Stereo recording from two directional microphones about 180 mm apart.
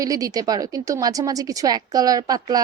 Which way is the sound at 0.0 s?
20° right (ahead or behind).